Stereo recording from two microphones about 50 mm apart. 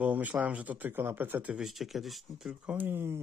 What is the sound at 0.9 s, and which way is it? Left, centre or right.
Speech, right.